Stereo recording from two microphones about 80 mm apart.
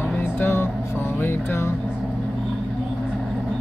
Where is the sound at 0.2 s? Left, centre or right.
Left.